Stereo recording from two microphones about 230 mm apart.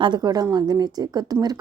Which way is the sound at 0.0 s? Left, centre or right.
Centre.